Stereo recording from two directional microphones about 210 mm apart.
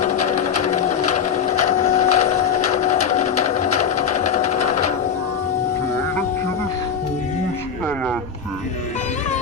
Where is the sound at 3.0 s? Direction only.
30° left (ahead or behind).